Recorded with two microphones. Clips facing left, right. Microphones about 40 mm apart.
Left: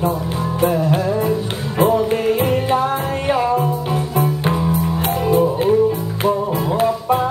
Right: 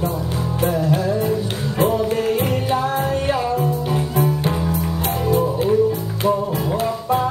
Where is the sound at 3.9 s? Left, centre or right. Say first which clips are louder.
Left 1 dB; centre.